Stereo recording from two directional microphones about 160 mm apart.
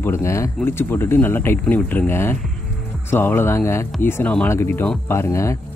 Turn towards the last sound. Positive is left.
turn(degrees=15)  # may be behind; listen again after turning